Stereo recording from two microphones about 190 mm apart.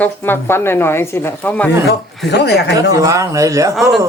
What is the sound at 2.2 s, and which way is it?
Speech, 60° left (ahead or behind).